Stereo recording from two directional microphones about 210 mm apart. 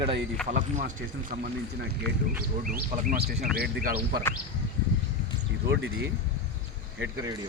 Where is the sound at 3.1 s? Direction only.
50° right (ahead or behind).